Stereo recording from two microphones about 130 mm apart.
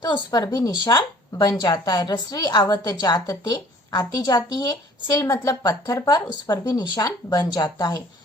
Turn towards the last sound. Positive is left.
turn(degrees=30)  # may be behind; listen again after turning